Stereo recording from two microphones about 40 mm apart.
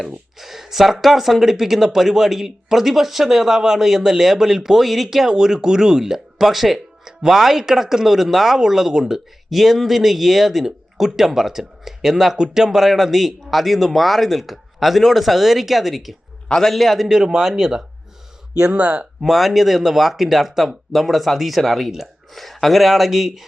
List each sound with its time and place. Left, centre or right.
0.3 s speech: centre
16.5 s a man's voice: centre
16.7 s speech: centre
17.1 s speech: centre
18.5 s speech: right
19.2 s speech: centre